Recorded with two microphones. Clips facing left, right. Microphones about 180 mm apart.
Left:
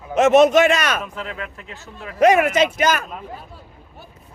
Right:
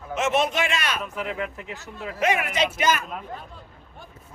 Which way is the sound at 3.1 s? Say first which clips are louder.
Left 1 dB; 5° left (ahead or behind).